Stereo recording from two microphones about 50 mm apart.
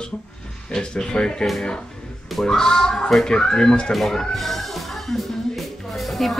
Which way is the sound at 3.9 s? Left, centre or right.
Centre.